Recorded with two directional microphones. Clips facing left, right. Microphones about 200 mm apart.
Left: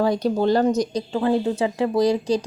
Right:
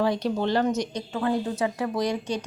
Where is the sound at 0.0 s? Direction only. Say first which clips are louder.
Left 5 dB; 40° left (ahead or behind).